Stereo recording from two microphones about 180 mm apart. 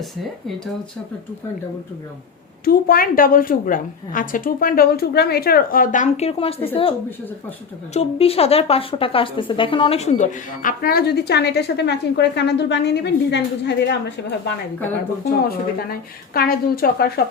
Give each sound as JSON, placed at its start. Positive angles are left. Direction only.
{"t": 2.6, "sound": "a woman's voice", "side_deg": 55}
{"t": 7.9, "sound": "a woman's voice", "side_deg": 35}
{"t": 15.4, "sound": "a woman's voice", "side_deg": 55}